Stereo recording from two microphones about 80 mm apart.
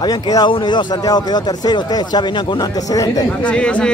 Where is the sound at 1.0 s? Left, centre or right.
Left.